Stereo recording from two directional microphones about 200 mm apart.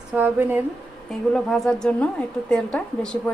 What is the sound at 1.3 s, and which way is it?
A woman's voice, centre (ahead or behind).